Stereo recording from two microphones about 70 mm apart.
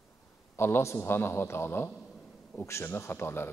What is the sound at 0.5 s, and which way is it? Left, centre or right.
A man's voice, left.